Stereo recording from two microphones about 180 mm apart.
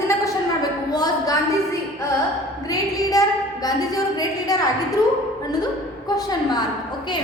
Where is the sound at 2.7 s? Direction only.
20° left (ahead or behind).